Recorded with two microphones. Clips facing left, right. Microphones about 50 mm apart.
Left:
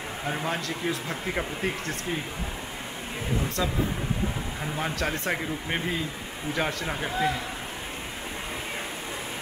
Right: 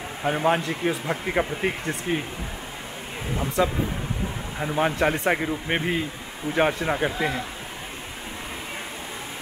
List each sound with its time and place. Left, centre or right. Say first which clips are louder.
0.2 s speech: right 8 dB; right
3.6 s speech: right 8 dB; right
4.7 s speech: right 8 dB; right